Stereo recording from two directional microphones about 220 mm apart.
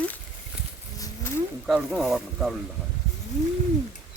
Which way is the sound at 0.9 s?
15° left (ahead or behind).